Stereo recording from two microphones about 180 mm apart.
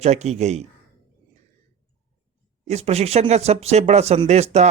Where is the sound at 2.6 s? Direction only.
35° right (ahead or behind).